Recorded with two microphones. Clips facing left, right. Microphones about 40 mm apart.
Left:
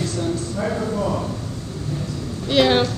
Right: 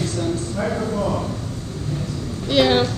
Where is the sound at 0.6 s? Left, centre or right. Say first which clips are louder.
Even; centre.